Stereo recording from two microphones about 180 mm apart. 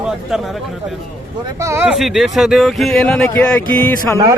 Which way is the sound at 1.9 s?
Centre (ahead or behind).